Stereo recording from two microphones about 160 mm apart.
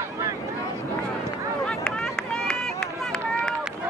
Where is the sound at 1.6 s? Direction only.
5° left (ahead or behind).